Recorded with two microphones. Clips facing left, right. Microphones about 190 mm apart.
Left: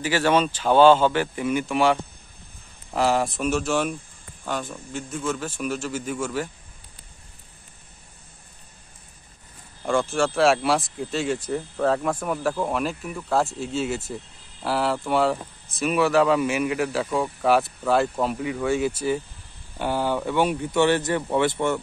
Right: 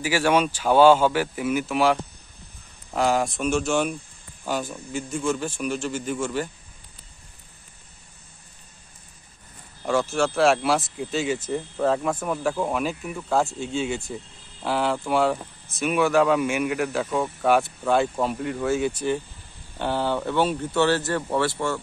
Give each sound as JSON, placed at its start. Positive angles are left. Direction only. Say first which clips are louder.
{"t": 0.0, "sound": "speech", "louder": "even", "side_deg": -10}
{"t": 9.8, "sound": "speech", "louder": "even", "side_deg": -5}